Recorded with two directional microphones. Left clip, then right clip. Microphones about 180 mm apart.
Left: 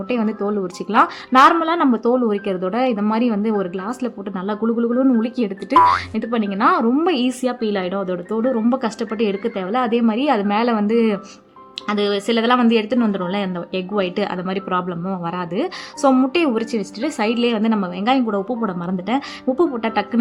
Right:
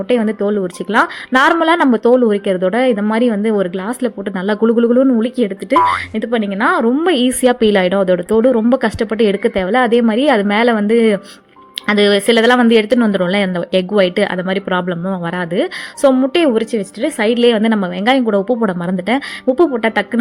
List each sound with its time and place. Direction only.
0.1 s speech: 15° right (ahead or behind)